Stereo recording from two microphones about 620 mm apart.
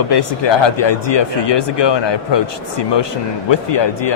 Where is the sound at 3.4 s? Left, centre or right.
Left.